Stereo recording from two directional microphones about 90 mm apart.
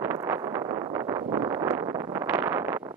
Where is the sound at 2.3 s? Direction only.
25° right (ahead or behind).